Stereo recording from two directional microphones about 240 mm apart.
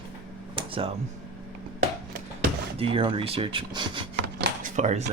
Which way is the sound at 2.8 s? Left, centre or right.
Right.